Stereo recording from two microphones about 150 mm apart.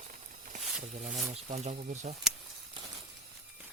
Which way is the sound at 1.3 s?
45° right (ahead or behind).